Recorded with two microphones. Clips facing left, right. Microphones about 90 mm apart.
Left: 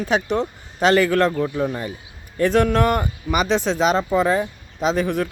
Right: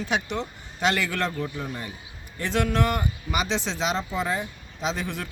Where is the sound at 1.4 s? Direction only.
90° left.